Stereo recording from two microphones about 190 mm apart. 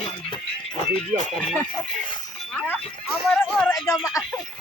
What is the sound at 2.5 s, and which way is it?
Speech, 10° left (ahead or behind).